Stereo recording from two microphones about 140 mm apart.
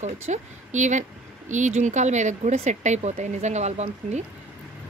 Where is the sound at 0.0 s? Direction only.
55° right (ahead or behind).